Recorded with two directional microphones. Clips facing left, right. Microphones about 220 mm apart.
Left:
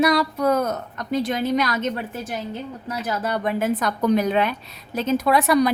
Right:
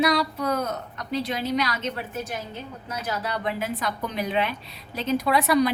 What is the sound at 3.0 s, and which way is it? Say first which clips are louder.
A woman's voice: left 4 dB; 50° left (ahead or behind).